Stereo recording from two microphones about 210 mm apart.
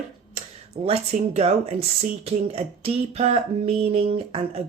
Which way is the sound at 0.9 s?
30° right (ahead or behind).